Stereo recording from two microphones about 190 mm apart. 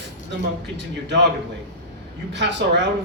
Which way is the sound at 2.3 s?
65° right (ahead or behind).